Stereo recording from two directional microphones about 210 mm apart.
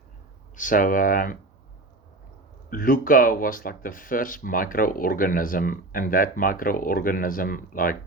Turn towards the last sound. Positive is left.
turn(degrees=40)  # may be behind; listen again after turning